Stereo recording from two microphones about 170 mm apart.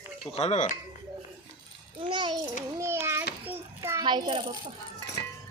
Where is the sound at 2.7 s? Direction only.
15° right (ahead or behind).